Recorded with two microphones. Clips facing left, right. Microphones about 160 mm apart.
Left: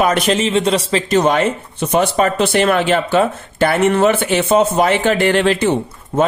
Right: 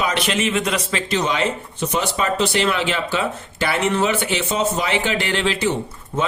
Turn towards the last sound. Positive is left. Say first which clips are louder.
# left 7 dB
turn(degrees=60)  # may be behind; listen again after turning